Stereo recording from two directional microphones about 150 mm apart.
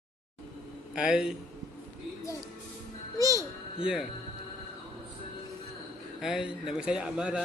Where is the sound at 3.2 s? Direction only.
25° right (ahead or behind).